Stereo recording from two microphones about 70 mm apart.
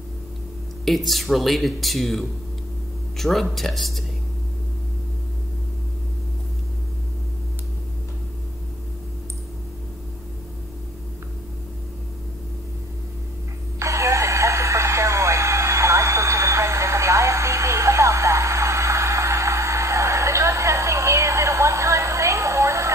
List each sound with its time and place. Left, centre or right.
0.8 s speech: centre
13.7 s radio: right